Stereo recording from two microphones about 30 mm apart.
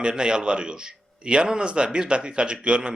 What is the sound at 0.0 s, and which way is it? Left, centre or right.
Speech, right.